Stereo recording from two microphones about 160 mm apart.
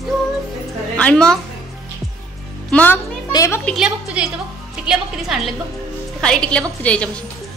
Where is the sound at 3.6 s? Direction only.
5° right (ahead or behind).